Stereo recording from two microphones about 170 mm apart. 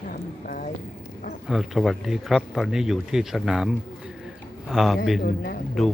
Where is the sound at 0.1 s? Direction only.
55° left (ahead or behind).